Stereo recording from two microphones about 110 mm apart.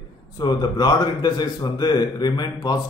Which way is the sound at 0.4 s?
40° left (ahead or behind).